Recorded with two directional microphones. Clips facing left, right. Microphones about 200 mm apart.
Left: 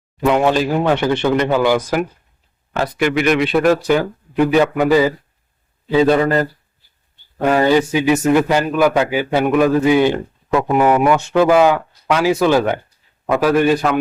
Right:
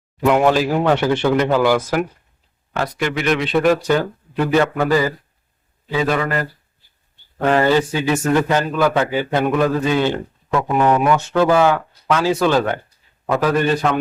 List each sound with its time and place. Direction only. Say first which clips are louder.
0.3 s a man's voice: even; centre (ahead or behind); by 5.1 s 15° left (ahead or behind)
5.9 s a man's voice: left 6 dB; 30° left (ahead or behind)
7.4 s a man's voice: left 2 dB; 10° left (ahead or behind)